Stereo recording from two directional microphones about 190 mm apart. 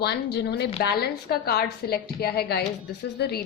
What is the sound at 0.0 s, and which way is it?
A woman's voice, 60° left (ahead or behind).